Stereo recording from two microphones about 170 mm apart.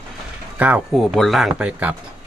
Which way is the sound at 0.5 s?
10° right (ahead or behind).